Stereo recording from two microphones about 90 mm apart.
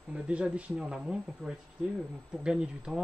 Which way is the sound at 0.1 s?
10° right (ahead or behind).